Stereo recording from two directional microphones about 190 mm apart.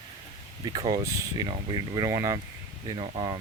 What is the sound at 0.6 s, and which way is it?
Speech, 20° right (ahead or behind).